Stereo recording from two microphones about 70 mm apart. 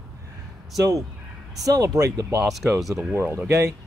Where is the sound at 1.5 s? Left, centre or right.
Right.